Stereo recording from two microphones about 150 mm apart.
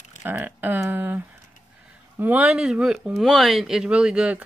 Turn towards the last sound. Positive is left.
turn(degrees=-5)  # may be behind; listen again after turning